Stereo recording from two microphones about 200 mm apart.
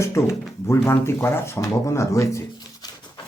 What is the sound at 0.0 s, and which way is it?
Speech, 15° left (ahead or behind).